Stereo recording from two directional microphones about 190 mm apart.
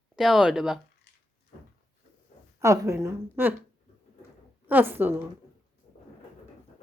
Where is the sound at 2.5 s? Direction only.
15° right (ahead or behind).